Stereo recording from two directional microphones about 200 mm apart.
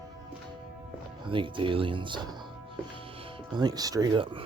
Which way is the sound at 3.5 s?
20° right (ahead or behind).